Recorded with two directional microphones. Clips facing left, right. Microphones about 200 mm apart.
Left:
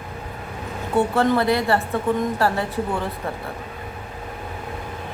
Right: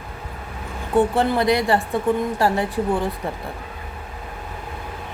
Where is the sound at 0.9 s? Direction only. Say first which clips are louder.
Right 1 dB; 15° right (ahead or behind).